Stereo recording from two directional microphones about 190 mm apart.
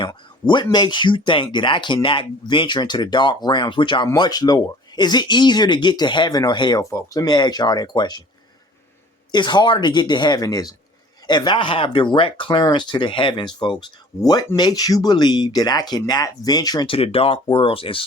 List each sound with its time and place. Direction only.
0.0 s speech: 25° left (ahead or behind)
9.3 s speech: 25° left (ahead or behind)